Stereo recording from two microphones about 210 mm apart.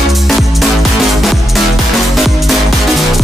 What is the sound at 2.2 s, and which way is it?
Music, centre (ahead or behind).